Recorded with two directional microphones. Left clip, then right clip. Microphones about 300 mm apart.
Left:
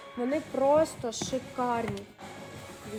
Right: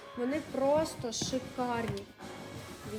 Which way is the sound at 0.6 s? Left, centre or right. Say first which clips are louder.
Left 5 dB; centre.